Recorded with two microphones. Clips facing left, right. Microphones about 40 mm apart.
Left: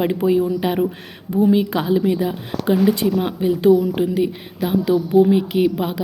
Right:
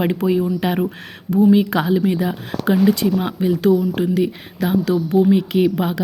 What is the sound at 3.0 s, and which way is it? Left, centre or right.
A woman's voice, centre.